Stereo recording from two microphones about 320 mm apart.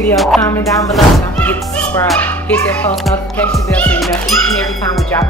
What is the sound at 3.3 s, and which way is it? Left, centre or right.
Speech, centre.